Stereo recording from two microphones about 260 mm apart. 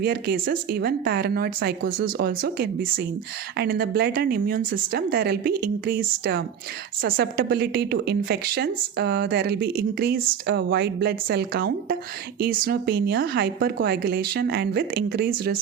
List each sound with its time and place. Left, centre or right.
0.0 s a woman's voice: right